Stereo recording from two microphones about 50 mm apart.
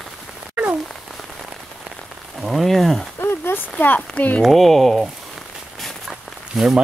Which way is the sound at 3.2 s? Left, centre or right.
Left.